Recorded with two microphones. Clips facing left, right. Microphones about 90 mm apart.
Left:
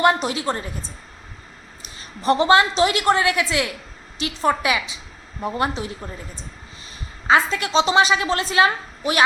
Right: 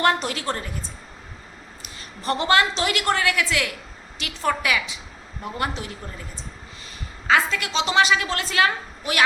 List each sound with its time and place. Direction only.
0.0 s a woman's voice: 20° left (ahead or behind)
2.0 s a woman's voice: 20° left (ahead or behind)
7.3 s a woman's voice: 25° left (ahead or behind)